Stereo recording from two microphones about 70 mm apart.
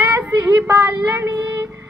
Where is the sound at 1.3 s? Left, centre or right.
Right.